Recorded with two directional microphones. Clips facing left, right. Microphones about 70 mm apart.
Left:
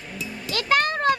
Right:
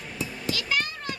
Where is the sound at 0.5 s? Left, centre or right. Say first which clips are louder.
Left 9 dB; left.